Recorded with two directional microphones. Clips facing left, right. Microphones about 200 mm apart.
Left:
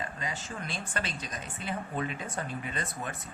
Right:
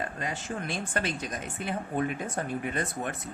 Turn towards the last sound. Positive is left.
turn(degrees=-55)  # may be behind; listen again after turning